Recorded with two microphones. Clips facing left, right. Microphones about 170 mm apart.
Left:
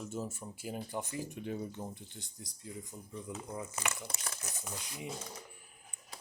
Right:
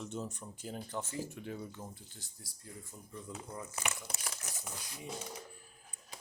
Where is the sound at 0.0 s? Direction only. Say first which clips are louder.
Left 1 dB; 5° left (ahead or behind).